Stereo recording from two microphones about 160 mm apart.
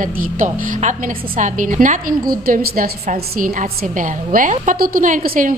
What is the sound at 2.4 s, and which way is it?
A woman's voice, 65° right (ahead or behind).